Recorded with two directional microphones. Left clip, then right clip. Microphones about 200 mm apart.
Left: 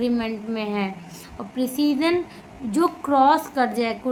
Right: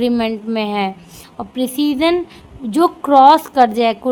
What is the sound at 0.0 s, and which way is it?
A woman's voice, 45° right (ahead or behind).